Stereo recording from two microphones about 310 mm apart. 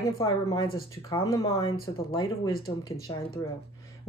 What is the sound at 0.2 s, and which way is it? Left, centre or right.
Speech, centre.